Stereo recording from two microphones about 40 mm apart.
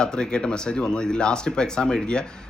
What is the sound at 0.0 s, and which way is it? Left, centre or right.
Speech, left.